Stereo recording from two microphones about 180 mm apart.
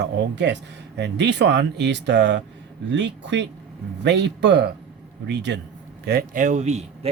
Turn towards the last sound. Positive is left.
turn(degrees=-35)  # may be behind; listen again after turning